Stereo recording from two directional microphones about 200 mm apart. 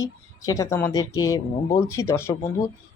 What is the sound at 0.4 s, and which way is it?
A woman's voice, 15° left (ahead or behind).